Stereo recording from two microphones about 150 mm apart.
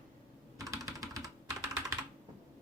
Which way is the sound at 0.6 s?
20° right (ahead or behind).